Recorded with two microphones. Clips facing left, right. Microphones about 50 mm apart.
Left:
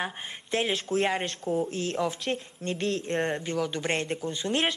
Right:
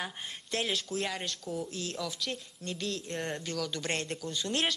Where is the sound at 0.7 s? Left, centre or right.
Left.